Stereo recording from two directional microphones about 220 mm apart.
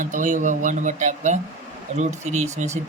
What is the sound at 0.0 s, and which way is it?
Speech, 35° right (ahead or behind).